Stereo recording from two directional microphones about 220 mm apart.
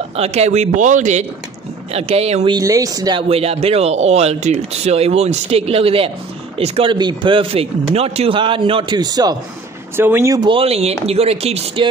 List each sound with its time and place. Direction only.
0.1 s a man's voice: 30° right (ahead or behind)